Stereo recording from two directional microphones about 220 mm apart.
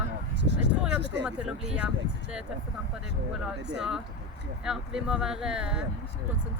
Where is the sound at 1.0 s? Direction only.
50° right (ahead or behind).